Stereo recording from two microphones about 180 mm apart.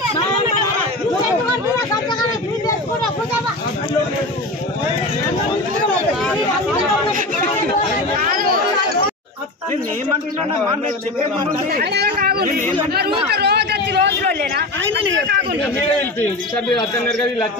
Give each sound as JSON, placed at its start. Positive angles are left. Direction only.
{"t": 8.2, "sound": "chatter", "side_deg": -50}
{"t": 11.7, "sound": "speech", "side_deg": -65}
{"t": 13.3, "sound": "a sound", "side_deg": -65}